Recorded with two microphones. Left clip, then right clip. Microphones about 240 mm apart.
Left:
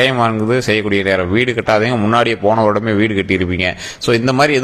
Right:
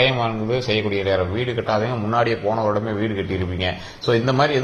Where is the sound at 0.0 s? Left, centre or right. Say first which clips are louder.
Left 6 dB; left.